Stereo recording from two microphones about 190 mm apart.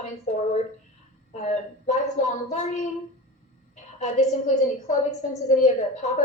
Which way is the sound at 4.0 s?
35° left (ahead or behind).